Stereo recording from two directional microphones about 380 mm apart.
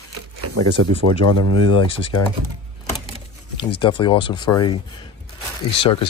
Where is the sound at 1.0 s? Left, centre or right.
Right.